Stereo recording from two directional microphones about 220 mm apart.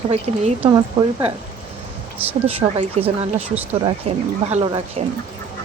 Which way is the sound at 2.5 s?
25° right (ahead or behind).